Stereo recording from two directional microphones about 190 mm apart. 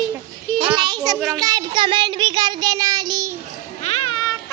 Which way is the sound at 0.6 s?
25° right (ahead or behind).